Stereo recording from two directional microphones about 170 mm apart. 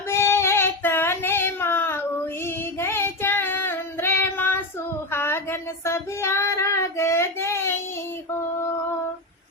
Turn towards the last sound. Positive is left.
turn(degrees=15)  # may be behind; listen again after turning